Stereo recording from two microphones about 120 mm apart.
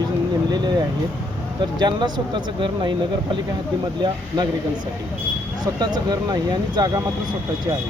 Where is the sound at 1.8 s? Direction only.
40° right (ahead or behind).